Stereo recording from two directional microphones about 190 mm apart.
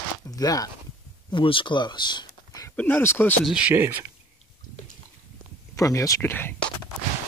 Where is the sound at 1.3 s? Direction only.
25° left (ahead or behind).